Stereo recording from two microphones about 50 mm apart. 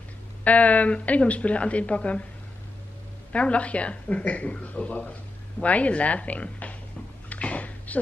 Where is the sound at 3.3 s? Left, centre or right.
Left.